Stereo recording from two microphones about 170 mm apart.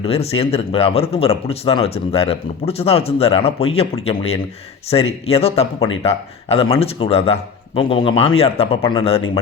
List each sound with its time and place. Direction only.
0.0 s speech: 35° left (ahead or behind)